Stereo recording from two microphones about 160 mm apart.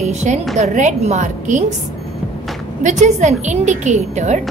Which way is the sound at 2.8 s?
45° right (ahead or behind).